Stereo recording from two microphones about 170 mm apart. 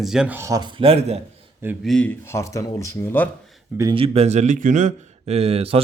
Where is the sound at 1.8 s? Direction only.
5° left (ahead or behind).